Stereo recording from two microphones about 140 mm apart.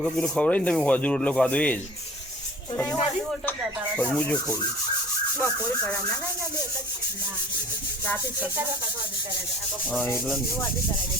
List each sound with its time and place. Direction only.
0.0 s speech: 5° left (ahead or behind); by 3.0 s 20° left (ahead or behind)
3.9 s speech: 10° left (ahead or behind)
5.4 s speech: 10° left (ahead or behind)